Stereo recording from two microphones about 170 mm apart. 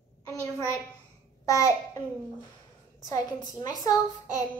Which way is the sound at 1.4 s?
20° left (ahead or behind).